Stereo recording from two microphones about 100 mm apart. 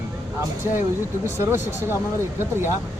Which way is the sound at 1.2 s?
25° right (ahead or behind).